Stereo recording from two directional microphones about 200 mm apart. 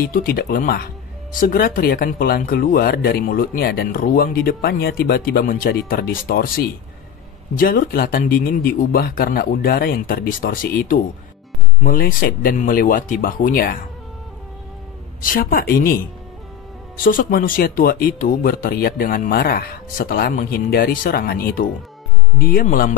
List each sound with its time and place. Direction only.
0.1 s speech: 45° left (ahead or behind)
15.2 s speech: 45° left (ahead or behind)
17.0 s speech: 45° left (ahead or behind)